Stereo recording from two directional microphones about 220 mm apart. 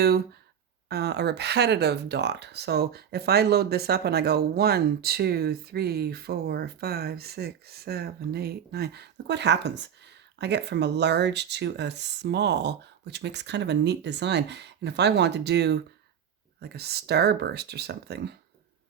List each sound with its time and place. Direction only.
0.9 s speech: 50° right (ahead or behind)